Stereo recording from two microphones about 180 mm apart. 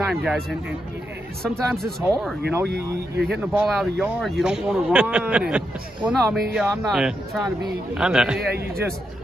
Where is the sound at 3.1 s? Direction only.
65° right (ahead or behind).